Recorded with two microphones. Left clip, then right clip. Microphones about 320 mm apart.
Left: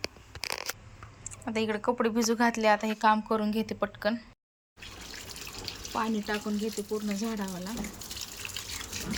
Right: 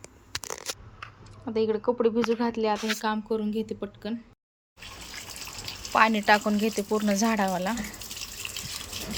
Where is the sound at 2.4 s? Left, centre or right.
Centre.